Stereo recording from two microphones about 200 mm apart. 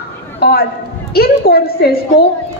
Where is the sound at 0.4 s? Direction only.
50° left (ahead or behind).